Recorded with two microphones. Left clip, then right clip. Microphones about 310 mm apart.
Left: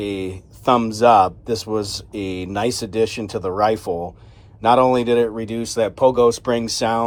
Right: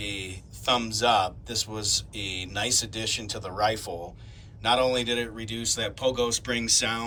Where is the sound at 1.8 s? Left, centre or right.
Left.